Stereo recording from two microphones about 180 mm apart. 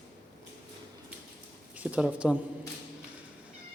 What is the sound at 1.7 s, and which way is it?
Speech, 5° right (ahead or behind).